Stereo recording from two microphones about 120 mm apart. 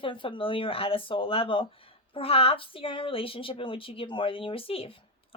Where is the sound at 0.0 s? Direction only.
45° left (ahead or behind).